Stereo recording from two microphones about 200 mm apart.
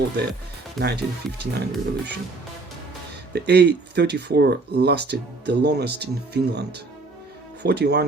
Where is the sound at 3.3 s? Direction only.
55° right (ahead or behind).